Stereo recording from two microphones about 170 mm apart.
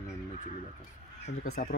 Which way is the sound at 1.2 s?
60° left (ahead or behind).